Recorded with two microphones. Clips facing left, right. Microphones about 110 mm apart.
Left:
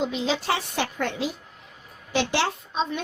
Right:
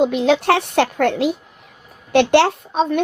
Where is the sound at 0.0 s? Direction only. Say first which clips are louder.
Right 10 dB; 60° right (ahead or behind).